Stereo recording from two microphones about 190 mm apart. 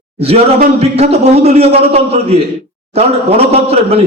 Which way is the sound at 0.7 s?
35° right (ahead or behind).